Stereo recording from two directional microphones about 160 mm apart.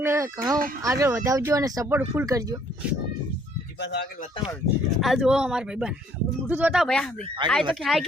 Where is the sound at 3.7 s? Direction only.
90° left.